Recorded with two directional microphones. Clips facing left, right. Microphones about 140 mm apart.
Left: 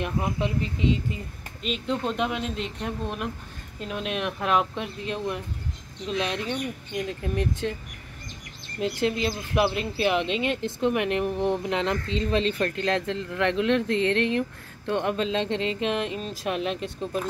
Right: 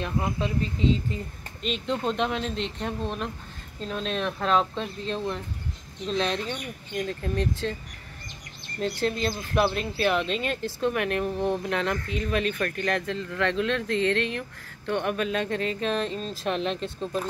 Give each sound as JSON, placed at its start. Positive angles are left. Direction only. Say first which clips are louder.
{"t": 0.0, "sound": "speech", "louder": "left 1 dB", "side_deg": 20}
{"t": 1.6, "sound": "speech", "louder": "even", "side_deg": 5}
{"t": 8.7, "sound": "speech", "louder": "left 1 dB", "side_deg": 10}